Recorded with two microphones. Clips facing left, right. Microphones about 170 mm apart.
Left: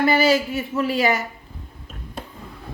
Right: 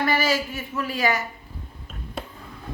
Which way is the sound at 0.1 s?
25° left (ahead or behind).